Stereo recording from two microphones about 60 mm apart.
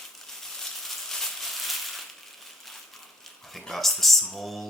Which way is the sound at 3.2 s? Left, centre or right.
Centre.